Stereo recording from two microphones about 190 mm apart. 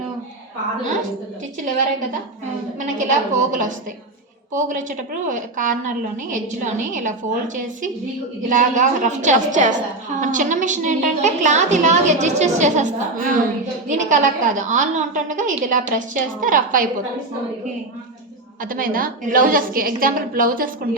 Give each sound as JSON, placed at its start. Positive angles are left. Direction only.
{"t": 2.7, "sound": "a woman's voice", "side_deg": -40}
{"t": 18.6, "sound": "a woman's voice", "side_deg": -45}